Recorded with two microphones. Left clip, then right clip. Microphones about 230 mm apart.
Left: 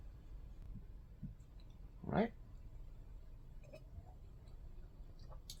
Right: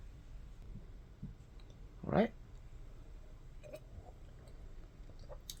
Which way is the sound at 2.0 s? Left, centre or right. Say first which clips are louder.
Right 5 dB; right.